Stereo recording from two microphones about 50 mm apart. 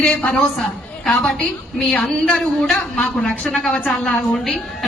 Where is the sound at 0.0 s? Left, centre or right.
Left.